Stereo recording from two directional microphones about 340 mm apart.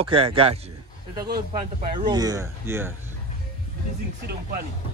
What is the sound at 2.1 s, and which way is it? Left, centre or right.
Speech, centre.